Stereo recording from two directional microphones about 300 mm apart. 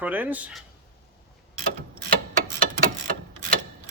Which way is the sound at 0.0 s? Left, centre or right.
Centre.